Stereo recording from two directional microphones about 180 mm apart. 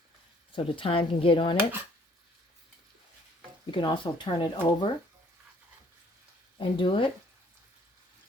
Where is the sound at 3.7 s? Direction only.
25° left (ahead or behind).